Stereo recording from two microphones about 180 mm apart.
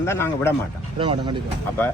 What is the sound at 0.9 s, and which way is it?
Speech, 30° right (ahead or behind).